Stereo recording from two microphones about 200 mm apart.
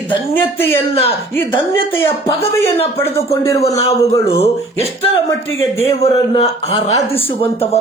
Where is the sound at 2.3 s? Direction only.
30° left (ahead or behind).